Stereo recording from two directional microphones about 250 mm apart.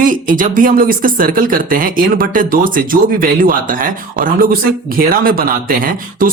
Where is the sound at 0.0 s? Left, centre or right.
Right.